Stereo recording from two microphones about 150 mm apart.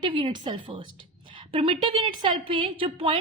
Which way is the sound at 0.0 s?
30° right (ahead or behind).